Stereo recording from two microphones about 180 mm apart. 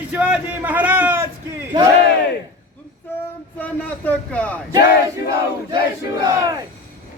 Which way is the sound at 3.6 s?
10° left (ahead or behind).